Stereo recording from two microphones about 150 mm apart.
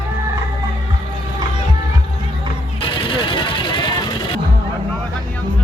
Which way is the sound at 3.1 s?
30° left (ahead or behind).